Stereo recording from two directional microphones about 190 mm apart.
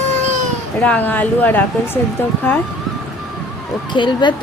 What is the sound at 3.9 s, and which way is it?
Speech, 25° left (ahead or behind).